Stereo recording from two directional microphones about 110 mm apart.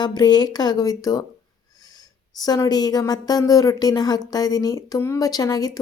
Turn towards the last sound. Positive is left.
turn(degrees=35)  # may be behind; listen again after turning